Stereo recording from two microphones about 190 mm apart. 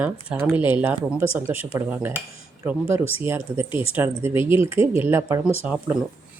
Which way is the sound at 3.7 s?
30° left (ahead or behind).